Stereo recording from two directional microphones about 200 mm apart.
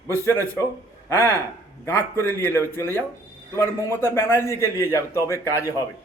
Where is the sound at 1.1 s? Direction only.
10° left (ahead or behind).